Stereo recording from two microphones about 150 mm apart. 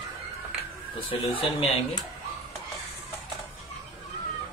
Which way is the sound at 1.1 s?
35° left (ahead or behind).